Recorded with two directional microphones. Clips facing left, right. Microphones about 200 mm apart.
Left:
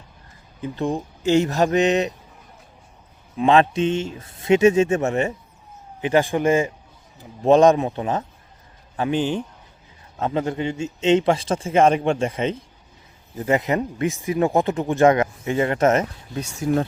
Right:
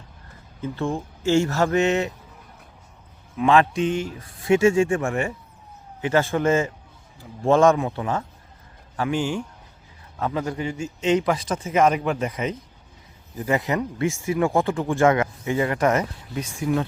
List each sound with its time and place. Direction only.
0.6 s speech: 15° left (ahead or behind)
3.3 s speech: 25° left (ahead or behind)
16.6 s speech: 40° left (ahead or behind)